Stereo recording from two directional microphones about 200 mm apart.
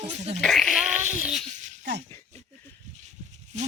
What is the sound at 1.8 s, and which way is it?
Speech, 55° right (ahead or behind).